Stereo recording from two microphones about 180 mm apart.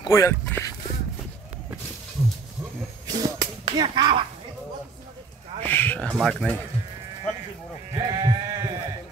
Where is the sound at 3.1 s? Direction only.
25° right (ahead or behind).